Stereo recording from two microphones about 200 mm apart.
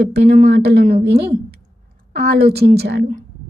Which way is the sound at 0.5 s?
55° right (ahead or behind).